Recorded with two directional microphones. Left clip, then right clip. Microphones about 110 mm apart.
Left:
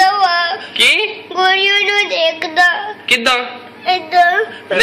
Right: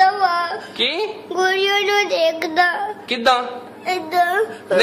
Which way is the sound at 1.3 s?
50° right (ahead or behind).